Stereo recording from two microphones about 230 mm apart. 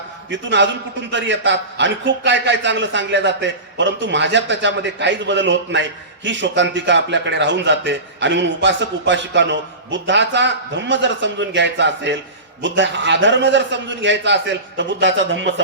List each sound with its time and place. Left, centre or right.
0.3 s a man's voice: right